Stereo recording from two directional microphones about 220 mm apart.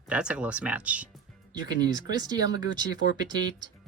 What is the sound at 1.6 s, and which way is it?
Speech, 20° right (ahead or behind).